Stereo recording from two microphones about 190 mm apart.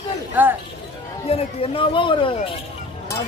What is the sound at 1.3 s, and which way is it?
Speech, 30° left (ahead or behind).